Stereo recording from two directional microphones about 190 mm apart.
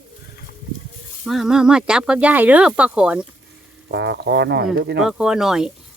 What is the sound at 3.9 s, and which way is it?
Speech, 60° right (ahead or behind).